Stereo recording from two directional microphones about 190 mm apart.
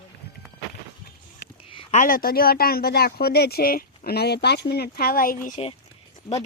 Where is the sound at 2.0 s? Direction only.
45° left (ahead or behind).